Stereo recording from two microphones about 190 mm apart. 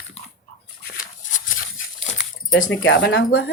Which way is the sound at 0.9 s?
45° left (ahead or behind).